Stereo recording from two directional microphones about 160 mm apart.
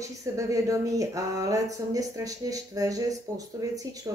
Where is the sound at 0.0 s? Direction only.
20° right (ahead or behind).